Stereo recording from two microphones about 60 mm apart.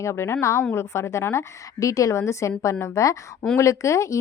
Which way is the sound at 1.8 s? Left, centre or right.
Left.